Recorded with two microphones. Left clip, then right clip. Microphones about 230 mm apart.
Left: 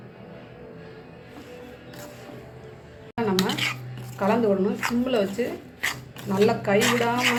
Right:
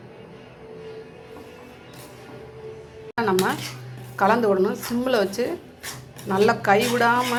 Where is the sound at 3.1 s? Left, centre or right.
Centre.